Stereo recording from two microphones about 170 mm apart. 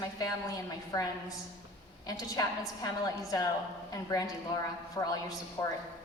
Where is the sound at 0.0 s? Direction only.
20° left (ahead or behind).